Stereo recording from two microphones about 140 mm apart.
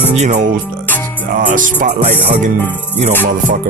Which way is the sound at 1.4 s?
70° right (ahead or behind).